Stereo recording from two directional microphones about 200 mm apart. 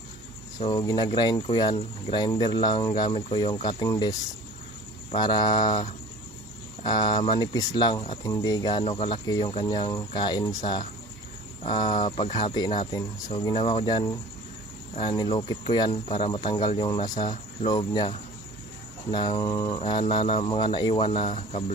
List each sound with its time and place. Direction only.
0.7 s speech: 20° left (ahead or behind)
11.6 s speech: 20° left (ahead or behind)